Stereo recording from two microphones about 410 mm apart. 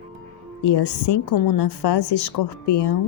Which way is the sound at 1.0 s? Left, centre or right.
Left.